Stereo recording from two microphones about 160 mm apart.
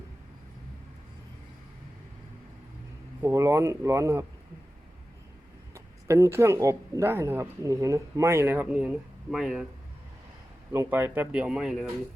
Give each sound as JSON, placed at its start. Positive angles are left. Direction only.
{"t": 3.2, "sound": "speech", "side_deg": -20}
{"t": 5.7, "sound": "speech", "side_deg": -20}
{"t": 10.7, "sound": "speech", "side_deg": -15}